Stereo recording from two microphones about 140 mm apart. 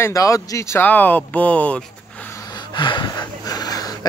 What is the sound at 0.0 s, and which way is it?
Speech, 25° left (ahead or behind).